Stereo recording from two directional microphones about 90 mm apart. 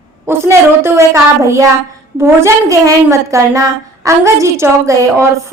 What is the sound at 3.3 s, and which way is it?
A woman's voice, 35° right (ahead or behind).